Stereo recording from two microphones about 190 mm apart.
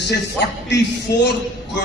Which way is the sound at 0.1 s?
60° left (ahead or behind).